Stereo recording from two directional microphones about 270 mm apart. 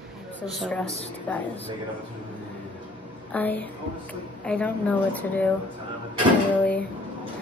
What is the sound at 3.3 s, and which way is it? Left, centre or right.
A woman's voice, centre.